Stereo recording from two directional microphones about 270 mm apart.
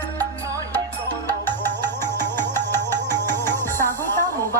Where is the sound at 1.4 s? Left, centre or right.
Centre.